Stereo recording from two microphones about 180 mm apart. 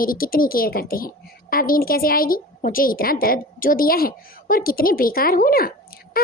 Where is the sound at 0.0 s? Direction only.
55° left (ahead or behind).